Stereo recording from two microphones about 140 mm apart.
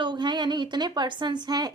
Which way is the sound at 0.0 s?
35° right (ahead or behind).